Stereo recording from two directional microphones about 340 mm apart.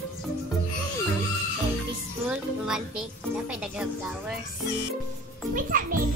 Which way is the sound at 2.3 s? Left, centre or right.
Centre.